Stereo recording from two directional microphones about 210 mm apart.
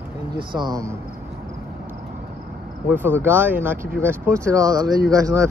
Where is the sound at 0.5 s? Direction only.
15° right (ahead or behind).